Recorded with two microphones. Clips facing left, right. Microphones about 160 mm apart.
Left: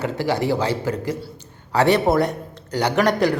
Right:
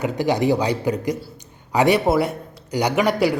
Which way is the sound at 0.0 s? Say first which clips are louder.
Right 2 dB; 15° right (ahead or behind).